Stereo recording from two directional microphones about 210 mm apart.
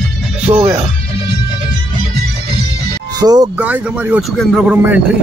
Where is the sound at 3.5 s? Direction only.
5° right (ahead or behind).